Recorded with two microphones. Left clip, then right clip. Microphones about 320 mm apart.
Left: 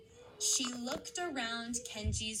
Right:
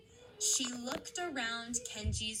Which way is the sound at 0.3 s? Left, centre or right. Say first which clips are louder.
Even; left.